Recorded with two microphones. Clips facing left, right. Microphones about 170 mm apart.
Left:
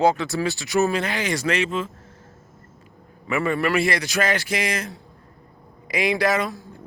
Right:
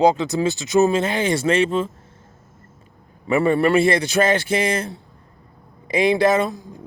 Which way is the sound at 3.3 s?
30° right (ahead or behind).